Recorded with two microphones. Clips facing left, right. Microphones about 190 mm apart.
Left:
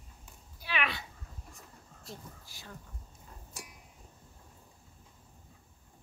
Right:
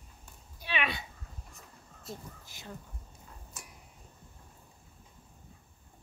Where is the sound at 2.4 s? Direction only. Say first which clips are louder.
Right 2 dB; 20° right (ahead or behind).